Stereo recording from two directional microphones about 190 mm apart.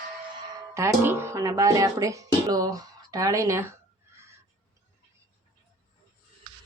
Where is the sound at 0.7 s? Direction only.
15° right (ahead or behind).